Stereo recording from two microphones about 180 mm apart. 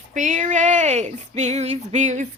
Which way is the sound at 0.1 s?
45° right (ahead or behind).